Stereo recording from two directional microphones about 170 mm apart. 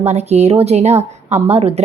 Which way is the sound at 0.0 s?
40° right (ahead or behind).